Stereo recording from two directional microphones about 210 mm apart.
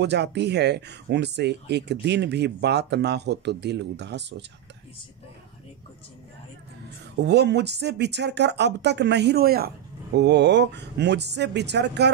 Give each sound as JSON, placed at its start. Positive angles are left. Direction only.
{"t": 0.0, "sound": "speech", "side_deg": -55}
{"t": 7.2, "sound": "speech", "side_deg": -55}